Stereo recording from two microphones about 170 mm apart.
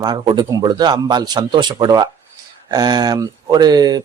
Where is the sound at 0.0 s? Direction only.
25° right (ahead or behind).